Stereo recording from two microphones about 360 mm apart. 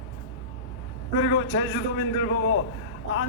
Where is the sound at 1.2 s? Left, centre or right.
Left.